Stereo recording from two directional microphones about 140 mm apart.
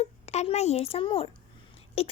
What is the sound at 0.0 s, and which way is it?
A child's voice, 50° left (ahead or behind).